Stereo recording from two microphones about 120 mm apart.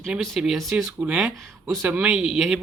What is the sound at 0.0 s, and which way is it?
Speech, centre (ahead or behind).